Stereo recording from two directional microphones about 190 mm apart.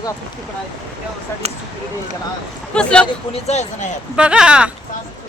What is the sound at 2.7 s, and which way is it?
Speech, 5° left (ahead or behind).